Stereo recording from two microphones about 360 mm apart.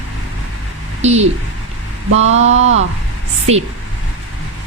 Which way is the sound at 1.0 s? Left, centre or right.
Centre.